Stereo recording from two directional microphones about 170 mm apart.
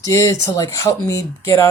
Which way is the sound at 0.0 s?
15° left (ahead or behind).